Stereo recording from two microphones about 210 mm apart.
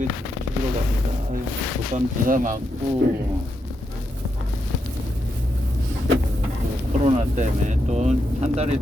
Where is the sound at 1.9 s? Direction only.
40° right (ahead or behind).